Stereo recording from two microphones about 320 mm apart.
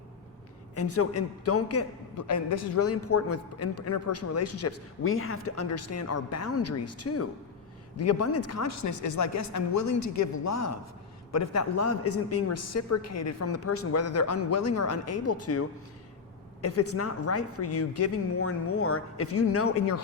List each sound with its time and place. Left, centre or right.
0.8 s a man's voice: left
16.6 s a man's voice: left